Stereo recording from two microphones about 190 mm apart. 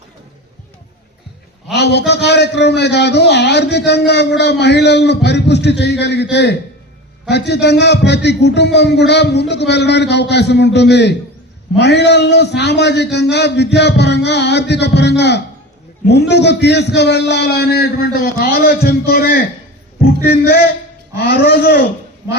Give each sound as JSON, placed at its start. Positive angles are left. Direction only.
{"t": 1.7, "sound": "a man's voice", "side_deg": 60}